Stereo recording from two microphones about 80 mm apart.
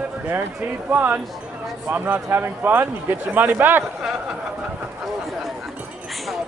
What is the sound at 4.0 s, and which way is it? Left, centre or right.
Speech, centre.